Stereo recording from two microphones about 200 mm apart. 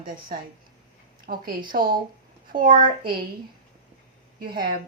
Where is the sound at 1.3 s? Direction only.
40° right (ahead or behind).